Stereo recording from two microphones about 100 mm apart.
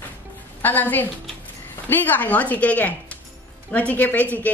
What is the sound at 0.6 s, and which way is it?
A woman's voice, 20° left (ahead or behind).